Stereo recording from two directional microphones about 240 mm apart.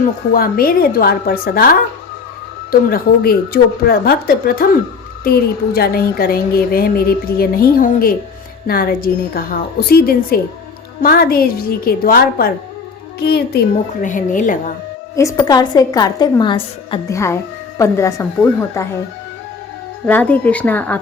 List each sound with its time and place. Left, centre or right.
0.3 s a woman's voice: left
2.9 s a woman's voice: left
15.1 s a woman's voice: centre
20.1 s a woman's voice: centre